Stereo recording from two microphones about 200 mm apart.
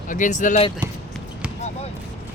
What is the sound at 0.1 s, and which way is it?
Speech, 40° left (ahead or behind).